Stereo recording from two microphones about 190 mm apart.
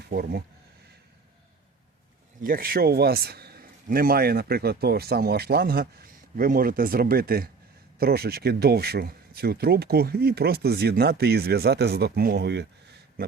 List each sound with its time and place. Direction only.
0.0 s speech: 55° right (ahead or behind)
2.4 s a man's voice: 50° right (ahead or behind)